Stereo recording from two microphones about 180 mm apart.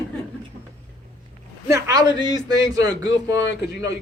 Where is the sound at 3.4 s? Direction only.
85° left.